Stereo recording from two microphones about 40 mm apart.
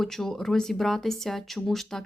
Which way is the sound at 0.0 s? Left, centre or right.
Centre.